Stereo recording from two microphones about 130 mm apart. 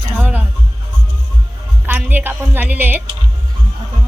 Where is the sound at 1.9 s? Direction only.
15° right (ahead or behind).